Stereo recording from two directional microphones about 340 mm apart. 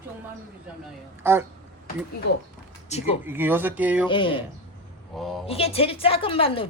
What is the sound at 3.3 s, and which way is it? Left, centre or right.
Speech, centre.